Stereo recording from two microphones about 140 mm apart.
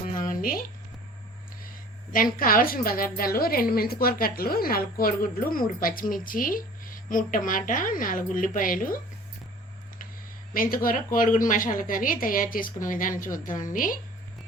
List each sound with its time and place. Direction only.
0.2 s a sound: 80° left
2.1 s a woman's voice: 90° left
10.5 s speech: 90° left